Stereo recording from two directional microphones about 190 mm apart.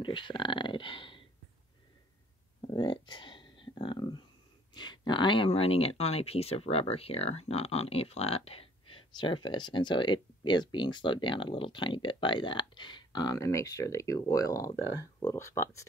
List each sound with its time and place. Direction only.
0.0 s speech: 25° left (ahead or behind)
2.6 s a sound: 25° left (ahead or behind)
4.7 s speech: 25° left (ahead or behind)